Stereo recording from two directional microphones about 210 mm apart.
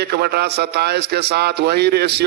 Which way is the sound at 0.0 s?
50° right (ahead or behind).